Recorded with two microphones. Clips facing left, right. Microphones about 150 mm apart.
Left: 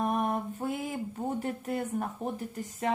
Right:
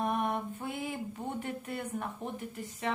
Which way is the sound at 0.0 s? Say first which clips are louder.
Left 2 dB; 35° left (ahead or behind).